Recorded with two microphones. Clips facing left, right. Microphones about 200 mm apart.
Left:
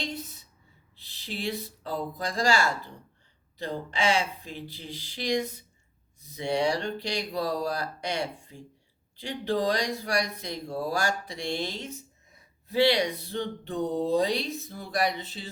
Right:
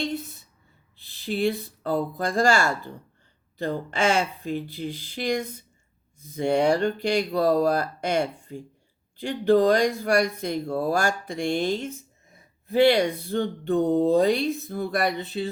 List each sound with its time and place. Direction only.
1.2 s speech: 55° right (ahead or behind)